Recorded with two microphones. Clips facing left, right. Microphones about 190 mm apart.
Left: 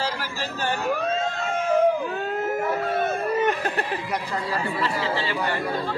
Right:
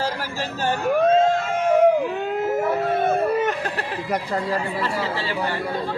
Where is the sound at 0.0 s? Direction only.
45° right (ahead or behind).